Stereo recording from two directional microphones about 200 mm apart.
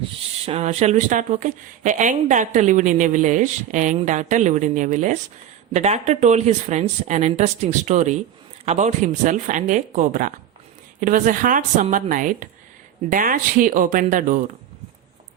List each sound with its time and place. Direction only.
0.4 s speech: 35° right (ahead or behind)